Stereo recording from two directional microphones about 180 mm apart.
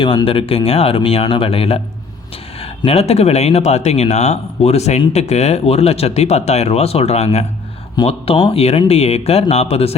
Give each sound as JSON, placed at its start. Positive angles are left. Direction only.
{"t": 0.0, "sound": "speech", "side_deg": 30}